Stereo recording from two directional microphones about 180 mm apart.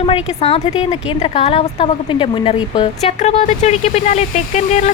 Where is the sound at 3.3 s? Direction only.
40° left (ahead or behind).